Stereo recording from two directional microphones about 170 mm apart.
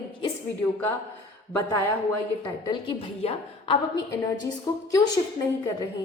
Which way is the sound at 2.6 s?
30° left (ahead or behind).